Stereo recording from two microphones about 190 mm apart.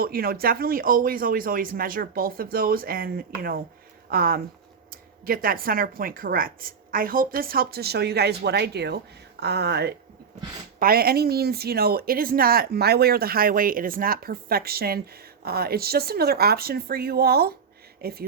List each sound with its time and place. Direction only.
0.0 s speech: 50° right (ahead or behind)